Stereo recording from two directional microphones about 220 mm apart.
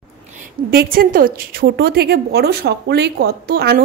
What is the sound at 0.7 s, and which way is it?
A woman's voice, 40° right (ahead or behind).